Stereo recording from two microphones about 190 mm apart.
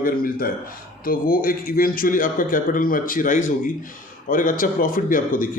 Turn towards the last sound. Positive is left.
turn(degrees=45)  # may be behind; listen again after turning